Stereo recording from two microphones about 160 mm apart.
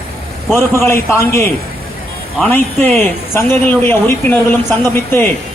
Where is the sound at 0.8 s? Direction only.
15° left (ahead or behind).